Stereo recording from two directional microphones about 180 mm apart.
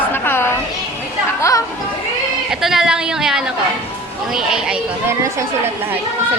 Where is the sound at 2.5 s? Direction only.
Centre (ahead or behind).